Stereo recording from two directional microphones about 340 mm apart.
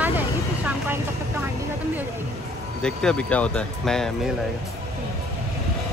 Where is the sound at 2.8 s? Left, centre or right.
Centre.